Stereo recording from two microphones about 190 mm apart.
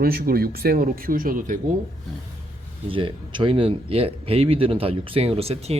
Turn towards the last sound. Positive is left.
turn(degrees=-35)  # may be behind; listen again after turning